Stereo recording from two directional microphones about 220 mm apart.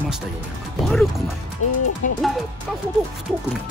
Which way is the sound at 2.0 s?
35° left (ahead or behind).